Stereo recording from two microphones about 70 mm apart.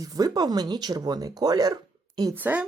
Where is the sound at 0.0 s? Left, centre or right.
Right.